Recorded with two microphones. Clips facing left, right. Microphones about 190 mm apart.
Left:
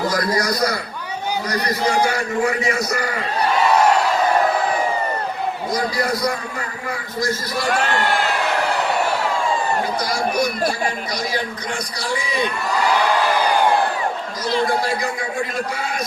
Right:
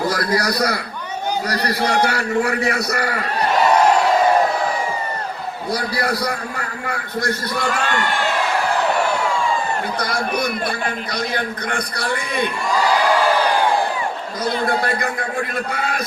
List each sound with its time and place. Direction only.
1.5 s a man's voice: 65° right (ahead or behind)
5.7 s a man's voice: 65° right (ahead or behind)
10.0 s a man's voice: 55° right (ahead or behind)
14.5 s a man's voice: 60° right (ahead or behind)